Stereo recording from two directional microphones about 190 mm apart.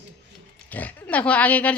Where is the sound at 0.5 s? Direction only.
10° left (ahead or behind).